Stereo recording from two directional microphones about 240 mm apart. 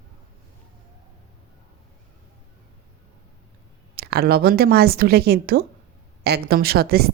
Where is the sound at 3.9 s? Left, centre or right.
Right.